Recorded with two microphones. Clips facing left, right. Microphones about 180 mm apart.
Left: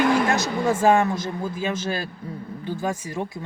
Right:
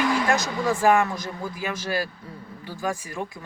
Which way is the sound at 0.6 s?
25° left (ahead or behind).